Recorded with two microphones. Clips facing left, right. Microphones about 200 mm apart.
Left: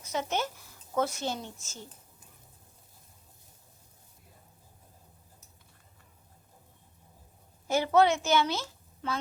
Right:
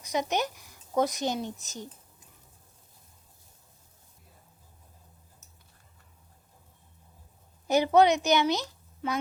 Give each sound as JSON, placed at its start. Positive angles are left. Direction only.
{"t": 0.0, "sound": "speech", "side_deg": -15}
{"t": 7.7, "sound": "a woman's voice", "side_deg": -15}